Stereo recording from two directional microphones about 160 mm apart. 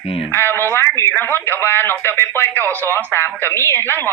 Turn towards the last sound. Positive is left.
turn(degrees=15)  # may be behind; listen again after turning